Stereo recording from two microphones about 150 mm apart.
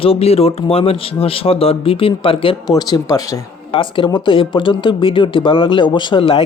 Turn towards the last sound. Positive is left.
turn(degrees=35)  # may be behind; listen again after turning